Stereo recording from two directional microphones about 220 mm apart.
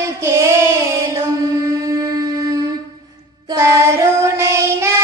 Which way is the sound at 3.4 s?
15° right (ahead or behind).